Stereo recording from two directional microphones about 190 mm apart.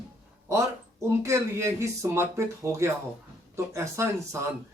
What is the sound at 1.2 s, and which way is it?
Speech, 15° right (ahead or behind).